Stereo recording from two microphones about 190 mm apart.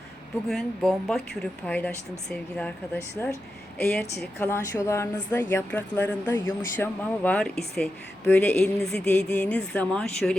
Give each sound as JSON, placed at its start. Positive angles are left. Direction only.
{"t": 0.4, "sound": "speech", "side_deg": 0}
{"t": 4.4, "sound": "speech", "side_deg": 15}